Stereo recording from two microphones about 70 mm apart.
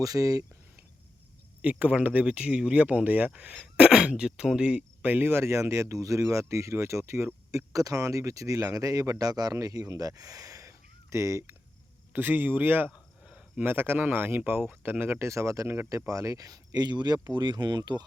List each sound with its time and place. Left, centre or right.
0.0 s speech: right
1.6 s speech: right
5.3 s speech: right
7.5 s speech: right
12.1 s speech: right
12.9 s a sound: centre
13.7 s speech: right
15.2 s speech: right
15.9 s speech: right